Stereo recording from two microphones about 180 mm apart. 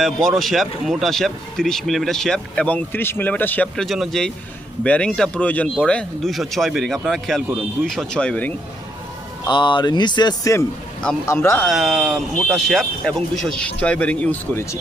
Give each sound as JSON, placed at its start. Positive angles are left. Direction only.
{"t": 0.0, "sound": "speech", "side_deg": 0}
{"t": 9.5, "sound": "speech", "side_deg": 25}
{"t": 11.6, "sound": "speech", "side_deg": 0}